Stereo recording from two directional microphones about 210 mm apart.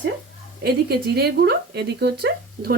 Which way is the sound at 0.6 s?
50° right (ahead or behind).